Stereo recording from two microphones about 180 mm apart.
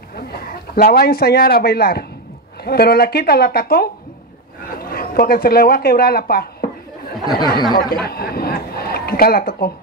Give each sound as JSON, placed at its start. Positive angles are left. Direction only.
{"t": 0.1, "sound": "a woman's voice", "side_deg": 55}
{"t": 7.3, "sound": "speech", "side_deg": 25}
{"t": 7.9, "sound": "speech", "side_deg": 60}